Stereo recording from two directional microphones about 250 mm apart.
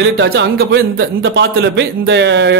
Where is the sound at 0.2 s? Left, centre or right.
Right.